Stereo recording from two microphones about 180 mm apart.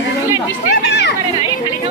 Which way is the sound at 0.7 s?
70° left (ahead or behind).